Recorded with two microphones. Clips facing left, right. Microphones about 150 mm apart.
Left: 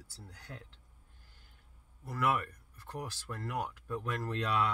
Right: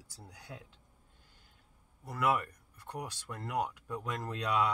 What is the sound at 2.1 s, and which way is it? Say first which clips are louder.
Speech: right 1 dB; 15° right (ahead or behind).